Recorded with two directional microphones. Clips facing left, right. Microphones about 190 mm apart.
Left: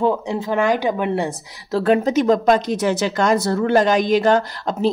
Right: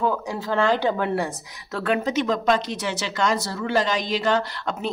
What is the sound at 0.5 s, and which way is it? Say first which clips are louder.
Speech: left 2 dB; 15° left (ahead or behind).